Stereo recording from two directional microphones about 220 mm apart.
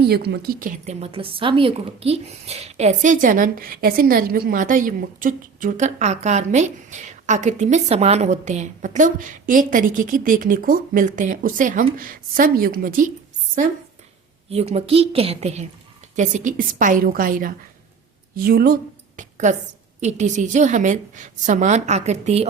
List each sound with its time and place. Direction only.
0.0 s a woman's voice: 50° right (ahead or behind)
14.5 s a woman's voice: 30° right (ahead or behind)